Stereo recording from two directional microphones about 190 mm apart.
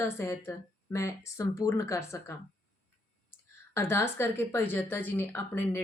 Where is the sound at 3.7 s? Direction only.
10° left (ahead or behind).